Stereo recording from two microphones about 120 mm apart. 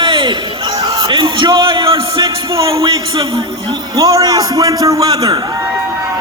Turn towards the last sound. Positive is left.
turn(degrees=-35)  # may be behind; listen again after turning